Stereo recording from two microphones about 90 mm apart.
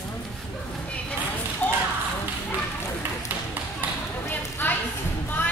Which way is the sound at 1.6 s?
15° left (ahead or behind).